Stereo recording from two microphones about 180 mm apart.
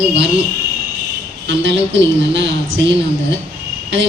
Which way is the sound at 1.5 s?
90° right.